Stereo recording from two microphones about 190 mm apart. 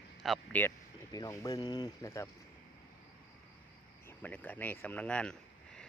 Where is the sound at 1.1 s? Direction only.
20° left (ahead or behind).